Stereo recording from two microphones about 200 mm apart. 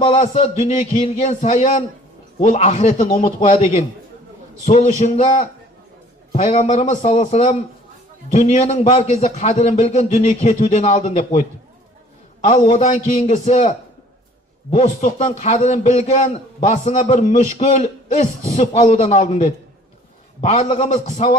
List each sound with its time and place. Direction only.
0.1 s a man's voice: 35° left (ahead or behind)
4.6 s a man's voice: 35° left (ahead or behind)
12.4 s a man's voice: 35° left (ahead or behind)